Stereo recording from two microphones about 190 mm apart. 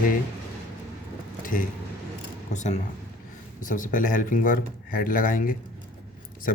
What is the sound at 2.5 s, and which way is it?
Speech, 40° left (ahead or behind).